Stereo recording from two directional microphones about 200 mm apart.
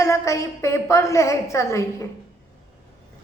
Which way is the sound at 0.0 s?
15° left (ahead or behind).